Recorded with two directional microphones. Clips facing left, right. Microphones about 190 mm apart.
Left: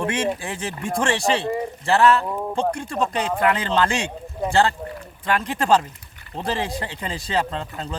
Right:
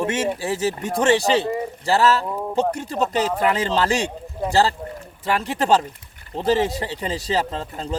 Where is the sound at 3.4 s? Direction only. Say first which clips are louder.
Left 2 dB; 30° right (ahead or behind).